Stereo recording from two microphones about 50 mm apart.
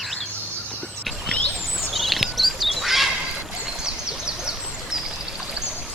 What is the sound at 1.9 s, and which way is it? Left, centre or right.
Duck, centre.